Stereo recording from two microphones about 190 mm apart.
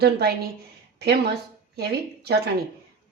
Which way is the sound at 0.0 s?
55° right (ahead or behind).